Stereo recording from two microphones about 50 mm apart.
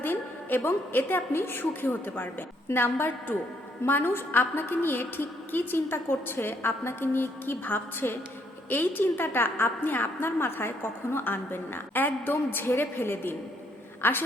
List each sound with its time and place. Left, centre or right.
0.0 s a woman's voice: left